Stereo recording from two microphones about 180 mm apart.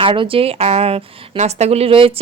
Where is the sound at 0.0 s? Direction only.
30° right (ahead or behind).